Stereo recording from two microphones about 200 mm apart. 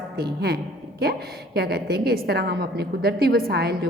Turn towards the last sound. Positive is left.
turn(degrees=-50)  # may be behind; listen again after turning